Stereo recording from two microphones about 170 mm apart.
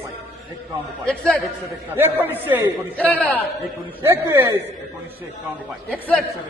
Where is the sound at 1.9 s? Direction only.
10° right (ahead or behind).